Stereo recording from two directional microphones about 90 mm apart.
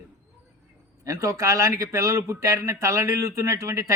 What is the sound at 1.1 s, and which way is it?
Speech, 35° right (ahead or behind).